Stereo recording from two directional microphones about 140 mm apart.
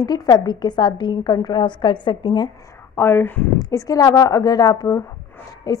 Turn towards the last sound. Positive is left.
turn(degrees=25)  # may be behind; listen again after turning